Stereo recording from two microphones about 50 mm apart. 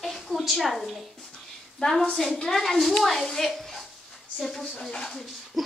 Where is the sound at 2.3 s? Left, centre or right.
Centre.